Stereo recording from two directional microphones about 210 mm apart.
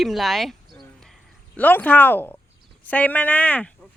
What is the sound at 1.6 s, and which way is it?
Speech, 10° left (ahead or behind).